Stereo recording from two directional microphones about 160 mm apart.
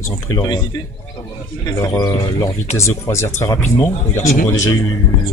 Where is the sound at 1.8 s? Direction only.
20° left (ahead or behind).